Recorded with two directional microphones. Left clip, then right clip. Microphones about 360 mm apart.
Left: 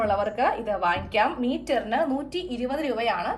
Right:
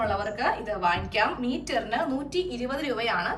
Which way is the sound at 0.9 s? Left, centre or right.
Centre.